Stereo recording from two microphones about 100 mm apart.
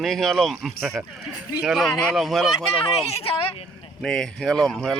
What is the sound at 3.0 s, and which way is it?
Speech, 85° left.